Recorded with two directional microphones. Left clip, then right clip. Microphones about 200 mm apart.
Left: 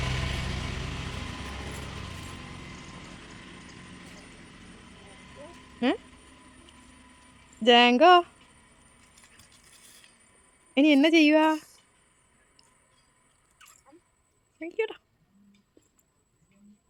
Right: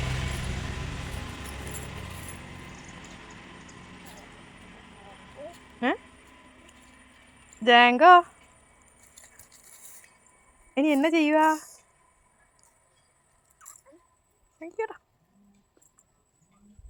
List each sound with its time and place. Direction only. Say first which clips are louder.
0.0 s vehicle: left 1 dB; 5° right (ahead or behind)
5.8 s speech: even; 30° left (ahead or behind)
7.6 s speech: right 2 dB; 30° left (ahead or behind)
10.8 s speech: left 3 dB; 25° left (ahead or behind)
13.6 s a sound: right 2 dB; 25° left (ahead or behind)
14.6 s speech: left 2 dB; 30° left (ahead or behind)